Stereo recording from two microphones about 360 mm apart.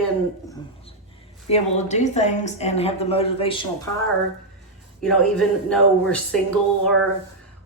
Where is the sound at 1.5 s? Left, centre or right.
Centre.